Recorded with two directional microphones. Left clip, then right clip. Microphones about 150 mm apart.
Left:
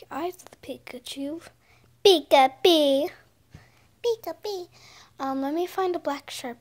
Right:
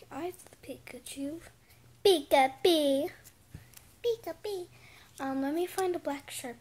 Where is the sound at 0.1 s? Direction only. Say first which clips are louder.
Left 8 dB; 25° left (ahead or behind).